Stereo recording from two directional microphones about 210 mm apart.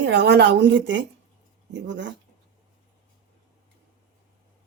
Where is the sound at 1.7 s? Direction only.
60° right (ahead or behind).